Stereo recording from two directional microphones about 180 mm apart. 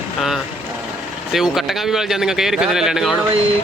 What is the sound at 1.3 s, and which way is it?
Speech, centre (ahead or behind).